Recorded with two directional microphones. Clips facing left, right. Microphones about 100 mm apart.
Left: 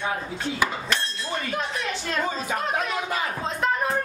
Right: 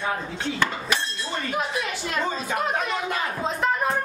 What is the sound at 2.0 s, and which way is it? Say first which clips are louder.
Speech: left 1 dB; centre (ahead or behind).